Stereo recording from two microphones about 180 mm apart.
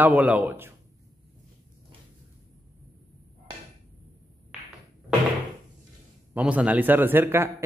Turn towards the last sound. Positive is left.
turn(degrees=-10)  # may be behind; listen again after turning